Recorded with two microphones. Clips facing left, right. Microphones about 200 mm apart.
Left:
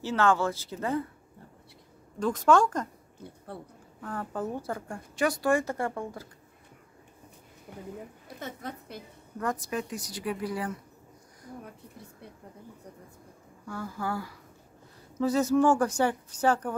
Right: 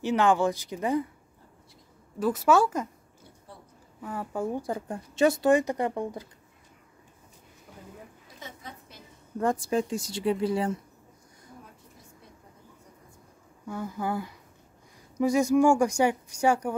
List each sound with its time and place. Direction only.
0.0 s a woman's voice: 15° right (ahead or behind)
2.1 s a woman's voice: 5° right (ahead or behind)
3.5 s a woman's voice: 60° left (ahead or behind)
4.0 s a woman's voice: 10° right (ahead or behind)
7.7 s a woman's voice: 20° left (ahead or behind)
8.4 s a woman's voice: 60° left (ahead or behind)
9.4 s a woman's voice: 30° right (ahead or behind)
11.6 s a sound: 65° left (ahead or behind)
13.7 s a woman's voice: 20° right (ahead or behind)